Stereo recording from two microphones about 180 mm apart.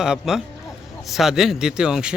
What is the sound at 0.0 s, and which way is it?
Speech, 5° right (ahead or behind).